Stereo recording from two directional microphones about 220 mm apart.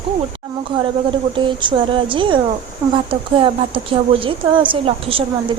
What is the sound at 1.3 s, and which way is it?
A woman's voice, 20° right (ahead or behind).